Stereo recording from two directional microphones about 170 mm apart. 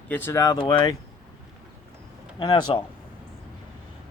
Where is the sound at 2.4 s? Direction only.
25° left (ahead or behind).